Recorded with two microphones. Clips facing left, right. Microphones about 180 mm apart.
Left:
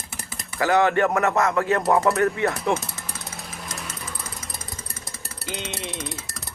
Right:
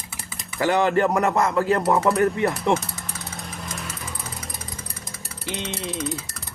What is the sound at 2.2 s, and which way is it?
Speech, 30° right (ahead or behind).